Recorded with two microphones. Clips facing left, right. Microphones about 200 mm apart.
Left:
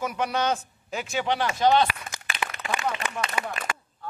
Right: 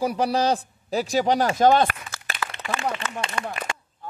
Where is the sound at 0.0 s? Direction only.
35° right (ahead or behind).